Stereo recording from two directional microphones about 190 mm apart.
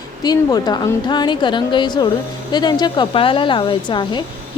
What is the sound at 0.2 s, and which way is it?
A woman's voice, 20° left (ahead or behind).